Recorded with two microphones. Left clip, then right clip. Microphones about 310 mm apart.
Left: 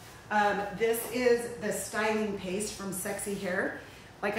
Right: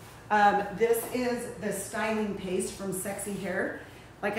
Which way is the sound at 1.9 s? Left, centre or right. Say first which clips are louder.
Left 1 dB; centre.